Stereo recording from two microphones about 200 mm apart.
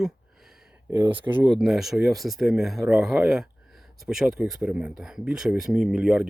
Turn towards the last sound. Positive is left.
turn(degrees=-5)  # may be behind; listen again after turning